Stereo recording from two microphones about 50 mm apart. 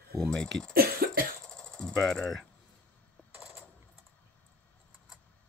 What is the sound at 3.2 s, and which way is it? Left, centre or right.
Coin, left.